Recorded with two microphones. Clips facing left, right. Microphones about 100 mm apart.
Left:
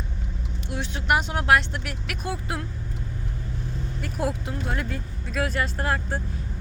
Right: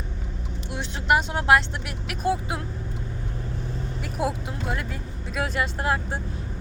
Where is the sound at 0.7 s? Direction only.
30° right (ahead or behind).